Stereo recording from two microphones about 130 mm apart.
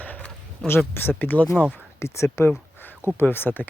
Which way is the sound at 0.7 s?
15° left (ahead or behind).